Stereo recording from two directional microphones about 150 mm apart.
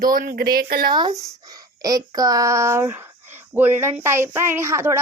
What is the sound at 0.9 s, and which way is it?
A child's voice, 30° right (ahead or behind).